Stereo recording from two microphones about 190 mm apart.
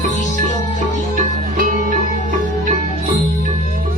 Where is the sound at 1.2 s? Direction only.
45° right (ahead or behind).